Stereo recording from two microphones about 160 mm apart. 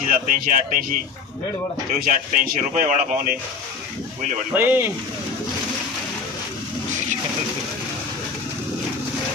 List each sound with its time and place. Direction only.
0.1 s speech: 55° right (ahead or behind)
2.0 s speech: 55° right (ahead or behind)
4.6 s speech: 10° right (ahead or behind)